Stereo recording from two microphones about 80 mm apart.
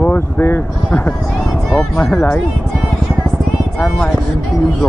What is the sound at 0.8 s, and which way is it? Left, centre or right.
Speech, centre.